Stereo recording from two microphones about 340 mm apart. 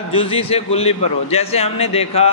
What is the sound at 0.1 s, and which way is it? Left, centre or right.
A man's voice, centre.